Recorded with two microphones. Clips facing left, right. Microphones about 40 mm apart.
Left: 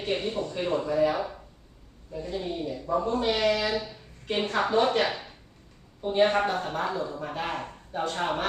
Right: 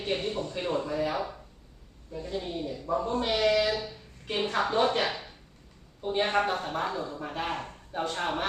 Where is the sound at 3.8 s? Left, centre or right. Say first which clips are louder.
Left 2 dB; centre.